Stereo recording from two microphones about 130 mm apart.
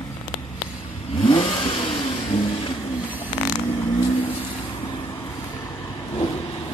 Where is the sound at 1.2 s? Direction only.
40° left (ahead or behind).